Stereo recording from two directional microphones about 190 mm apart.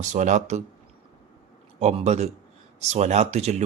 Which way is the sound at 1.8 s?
35° right (ahead or behind).